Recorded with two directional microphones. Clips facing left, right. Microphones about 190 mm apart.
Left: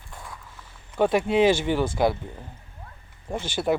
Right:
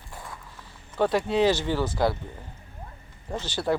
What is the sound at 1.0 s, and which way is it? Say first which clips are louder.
Speech: left 2 dB; 20° left (ahead or behind).